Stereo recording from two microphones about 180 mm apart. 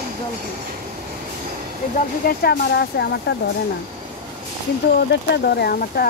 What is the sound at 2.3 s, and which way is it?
Speech, 60° left (ahead or behind).